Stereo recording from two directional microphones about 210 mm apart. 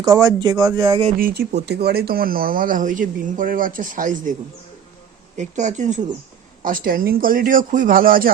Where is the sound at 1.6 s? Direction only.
50° right (ahead or behind).